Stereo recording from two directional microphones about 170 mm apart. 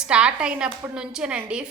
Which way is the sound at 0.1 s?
5° right (ahead or behind).